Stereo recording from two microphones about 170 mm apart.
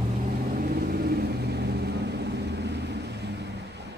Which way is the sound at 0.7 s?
65° right (ahead or behind).